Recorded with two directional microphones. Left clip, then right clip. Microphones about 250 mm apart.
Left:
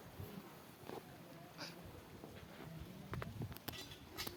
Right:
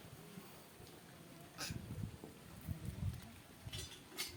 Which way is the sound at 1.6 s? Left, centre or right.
Right.